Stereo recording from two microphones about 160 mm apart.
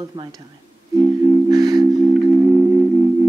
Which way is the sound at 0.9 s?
20° right (ahead or behind).